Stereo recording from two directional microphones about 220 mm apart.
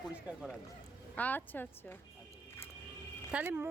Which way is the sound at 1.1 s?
5° left (ahead or behind).